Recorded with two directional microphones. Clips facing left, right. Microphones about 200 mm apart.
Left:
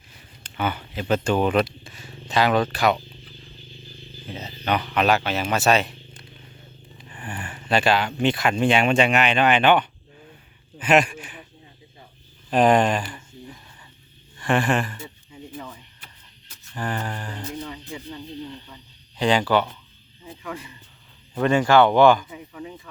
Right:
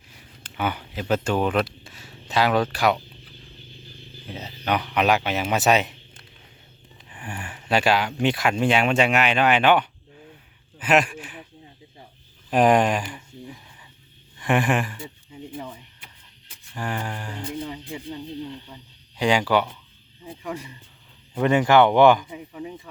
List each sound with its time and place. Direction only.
0.5 s speech: 10° right (ahead or behind)
4.3 s speech: 5° right (ahead or behind)
7.3 s speech: 10° right (ahead or behind)
12.5 s a sound: 10° right (ahead or behind)
14.3 s speech: 15° right (ahead or behind)
15.5 s a sound: 30° right (ahead or behind)
16.7 s speech: 10° right (ahead or behind)
17.4 s speech: 30° right (ahead or behind)
19.1 s speech: 10° right (ahead or behind)
20.4 s speech: 35° right (ahead or behind)
21.3 s speech: 20° right (ahead or behind)